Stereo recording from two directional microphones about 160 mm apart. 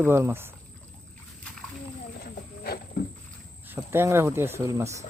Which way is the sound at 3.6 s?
15° right (ahead or behind).